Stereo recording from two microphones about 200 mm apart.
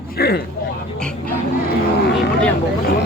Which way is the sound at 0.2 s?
50° left (ahead or behind).